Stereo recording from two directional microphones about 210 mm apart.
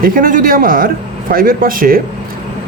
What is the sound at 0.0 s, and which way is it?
Speech, 40° right (ahead or behind).